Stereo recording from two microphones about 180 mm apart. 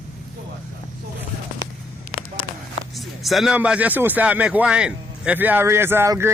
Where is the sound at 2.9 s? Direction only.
Centre (ahead or behind).